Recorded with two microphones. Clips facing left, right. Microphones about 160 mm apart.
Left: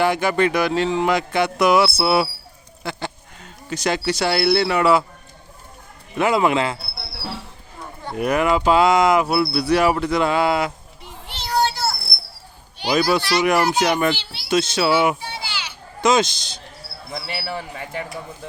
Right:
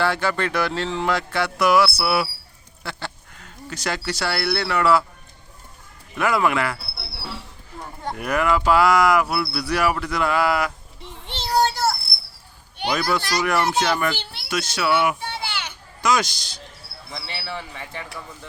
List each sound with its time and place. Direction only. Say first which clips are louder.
0.0 s speech: left 4 dB; 15° left (ahead or behind)
6.1 s speech: left 3 dB; 20° left (ahead or behind)
8.1 s speech: left 3 dB; 20° left (ahead or behind)
11.0 s child singing: right 2 dB; 25° right (ahead or behind)
11.6 s child singing: right 1 dB; 50° right (ahead or behind)
12.9 s speech: left 5 dB; 20° left (ahead or behind)
15.2 s children playing: right 1 dB; 60° right (ahead or behind)
16.0 s speech: left 4 dB; 25° left (ahead or behind)
17.1 s speech: left 4 dB; 45° left (ahead or behind)